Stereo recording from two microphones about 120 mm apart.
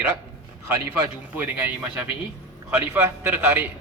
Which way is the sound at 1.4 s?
15° right (ahead or behind).